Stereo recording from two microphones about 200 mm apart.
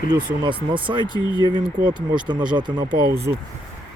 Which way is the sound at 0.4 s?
25° right (ahead or behind).